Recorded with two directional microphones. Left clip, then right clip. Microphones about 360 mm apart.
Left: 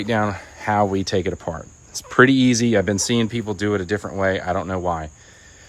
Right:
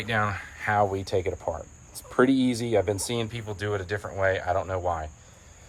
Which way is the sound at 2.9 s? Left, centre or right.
Left.